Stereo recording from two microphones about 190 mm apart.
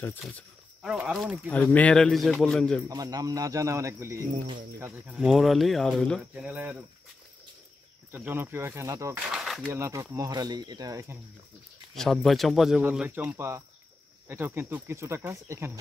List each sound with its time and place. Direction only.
0.8 s speech: centre (ahead or behind)
2.9 s speech: 20° right (ahead or behind)
5.1 s speech: centre (ahead or behind)
6.4 s speech: 10° right (ahead or behind)
8.1 s speech: 10° right (ahead or behind)
9.3 s a sound: centre (ahead or behind)
9.7 s speech: 15° right (ahead or behind)
12.0 s speech: centre (ahead or behind); by 15.8 s 15° right (ahead or behind)